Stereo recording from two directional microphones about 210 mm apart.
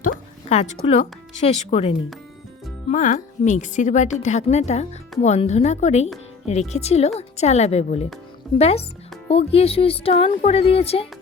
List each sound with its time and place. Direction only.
0.4 s a woman's voice: 30° left (ahead or behind)